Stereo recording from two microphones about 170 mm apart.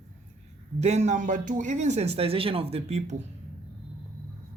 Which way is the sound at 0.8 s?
40° right (ahead or behind).